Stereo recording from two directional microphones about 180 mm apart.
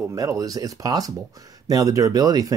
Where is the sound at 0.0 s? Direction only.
20° right (ahead or behind).